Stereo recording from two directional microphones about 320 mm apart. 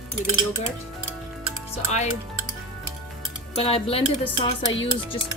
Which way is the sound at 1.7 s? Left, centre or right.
Left.